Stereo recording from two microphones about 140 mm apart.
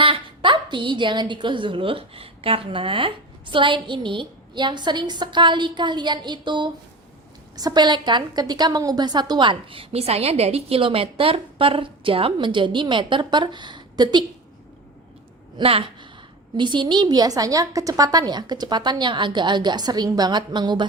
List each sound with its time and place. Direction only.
0.0 s a woman's voice: 35° right (ahead or behind)
15.5 s a woman's voice: 40° right (ahead or behind)